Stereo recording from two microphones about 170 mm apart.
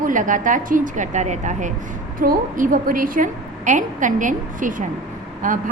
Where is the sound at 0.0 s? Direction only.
50° right (ahead or behind).